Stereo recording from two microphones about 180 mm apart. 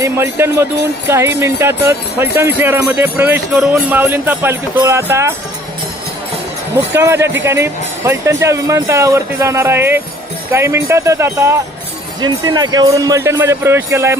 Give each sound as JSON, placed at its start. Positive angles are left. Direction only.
{"t": 0.0, "sound": "speech", "side_deg": -15}
{"t": 6.9, "sound": "speech", "side_deg": -15}